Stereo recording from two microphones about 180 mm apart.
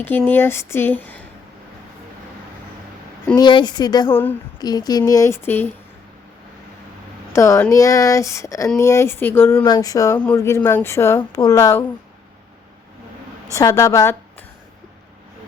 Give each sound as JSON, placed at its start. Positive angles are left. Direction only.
{"t": 0.0, "sound": "speech", "side_deg": 10}
{"t": 3.3, "sound": "speech", "side_deg": 25}
{"t": 4.1, "sound": "speech", "side_deg": 10}
{"t": 4.6, "sound": "speech", "side_deg": 20}
{"t": 7.3, "sound": "speech", "side_deg": 15}
{"t": 13.5, "sound": "speech", "side_deg": 20}